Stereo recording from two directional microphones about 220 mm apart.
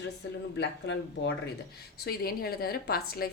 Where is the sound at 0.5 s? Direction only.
50° left (ahead or behind).